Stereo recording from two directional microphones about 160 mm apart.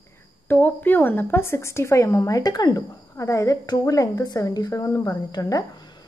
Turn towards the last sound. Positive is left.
turn(degrees=25)  # may be behind; listen again after turning